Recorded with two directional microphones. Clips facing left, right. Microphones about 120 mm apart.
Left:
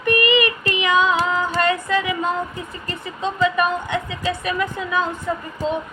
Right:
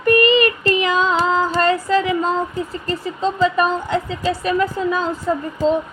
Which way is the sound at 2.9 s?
35° right (ahead or behind).